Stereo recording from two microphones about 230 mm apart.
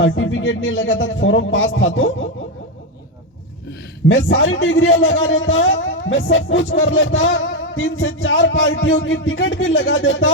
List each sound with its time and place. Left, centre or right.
0.0 s a man's voice: left
4.1 s a man's voice: left